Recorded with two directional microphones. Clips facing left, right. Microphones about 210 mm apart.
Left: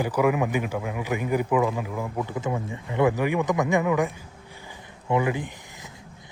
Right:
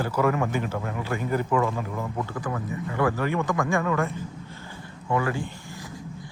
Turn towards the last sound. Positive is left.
turn(degrees=20)  # may be behind; listen again after turning